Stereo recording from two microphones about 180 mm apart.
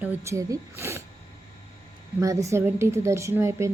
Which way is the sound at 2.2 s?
20° right (ahead or behind).